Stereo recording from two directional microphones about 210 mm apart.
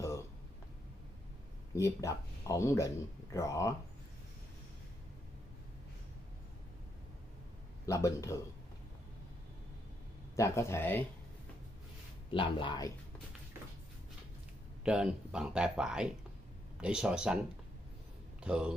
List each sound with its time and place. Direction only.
1.8 s speech: 15° left (ahead or behind)
7.8 s speech: 15° left (ahead or behind)
10.3 s speech: 15° left (ahead or behind)
12.3 s speech: 25° left (ahead or behind)
14.9 s speech: 5° right (ahead or behind)
18.4 s a man's voice: 5° right (ahead or behind)